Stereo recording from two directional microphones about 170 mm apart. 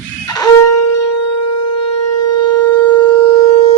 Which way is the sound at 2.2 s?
25° left (ahead or behind).